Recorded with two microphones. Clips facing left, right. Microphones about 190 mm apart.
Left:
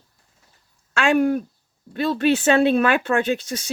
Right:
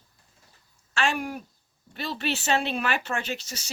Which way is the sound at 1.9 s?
55° left (ahead or behind).